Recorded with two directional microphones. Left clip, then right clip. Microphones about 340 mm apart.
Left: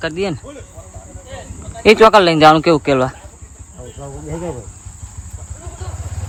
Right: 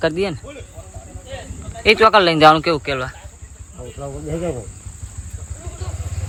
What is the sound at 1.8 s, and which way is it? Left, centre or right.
Speech, centre.